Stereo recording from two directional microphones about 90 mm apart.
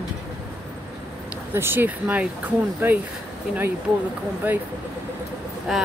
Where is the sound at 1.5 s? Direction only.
25° right (ahead or behind).